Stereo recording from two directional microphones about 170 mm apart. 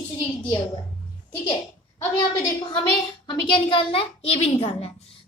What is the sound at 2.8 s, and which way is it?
Speech, 30° left (ahead or behind).